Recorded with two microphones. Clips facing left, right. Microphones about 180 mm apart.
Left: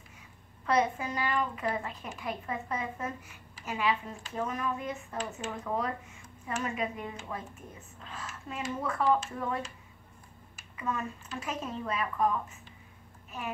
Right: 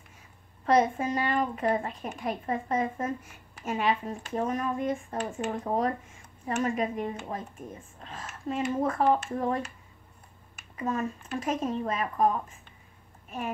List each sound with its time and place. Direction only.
0.7 s a woman's voice: 45° right (ahead or behind)
5.6 s a woman's voice: 40° right (ahead or behind); by 9.1 s 55° right (ahead or behind)
9.3 s speech: 40° right (ahead or behind)
10.8 s a woman's voice: 45° right (ahead or behind)